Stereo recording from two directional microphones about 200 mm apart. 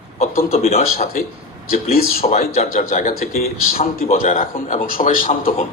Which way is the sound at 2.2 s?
35° left (ahead or behind).